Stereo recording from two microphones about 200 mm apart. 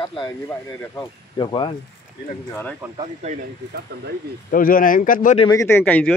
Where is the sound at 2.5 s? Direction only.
10° left (ahead or behind).